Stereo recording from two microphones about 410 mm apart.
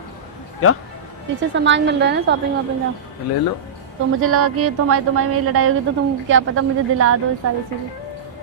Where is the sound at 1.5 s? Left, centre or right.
Right.